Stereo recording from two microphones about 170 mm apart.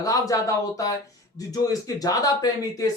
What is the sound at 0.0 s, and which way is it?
Speech, 20° left (ahead or behind).